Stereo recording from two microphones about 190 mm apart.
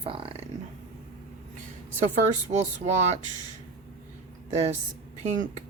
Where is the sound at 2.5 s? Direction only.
35° right (ahead or behind).